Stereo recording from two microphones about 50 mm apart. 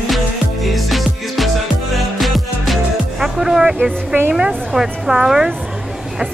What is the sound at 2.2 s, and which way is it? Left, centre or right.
Music, centre.